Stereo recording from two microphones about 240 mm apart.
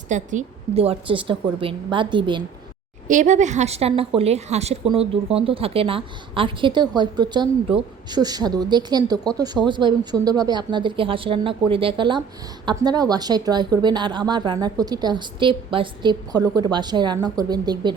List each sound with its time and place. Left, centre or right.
0.1 s a woman's voice: right
3.1 s a woman's voice: right